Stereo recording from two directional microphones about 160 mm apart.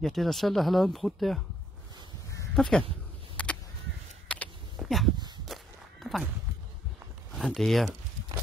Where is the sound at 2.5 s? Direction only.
5° left (ahead or behind).